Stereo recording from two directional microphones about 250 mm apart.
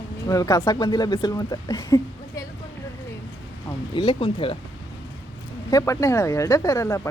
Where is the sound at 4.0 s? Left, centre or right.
Left.